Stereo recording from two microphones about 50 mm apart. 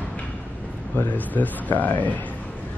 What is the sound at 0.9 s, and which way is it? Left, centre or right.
Speech, left.